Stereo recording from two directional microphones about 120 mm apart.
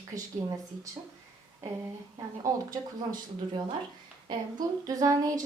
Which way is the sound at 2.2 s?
30° right (ahead or behind).